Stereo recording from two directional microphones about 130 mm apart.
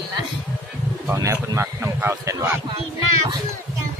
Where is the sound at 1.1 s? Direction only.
25° right (ahead or behind).